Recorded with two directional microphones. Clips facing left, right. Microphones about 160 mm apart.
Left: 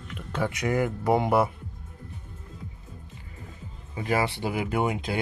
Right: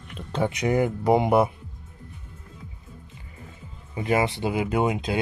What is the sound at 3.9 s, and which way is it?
Speech, 20° right (ahead or behind).